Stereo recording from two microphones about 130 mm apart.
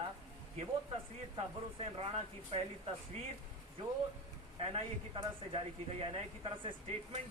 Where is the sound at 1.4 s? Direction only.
45° right (ahead or behind).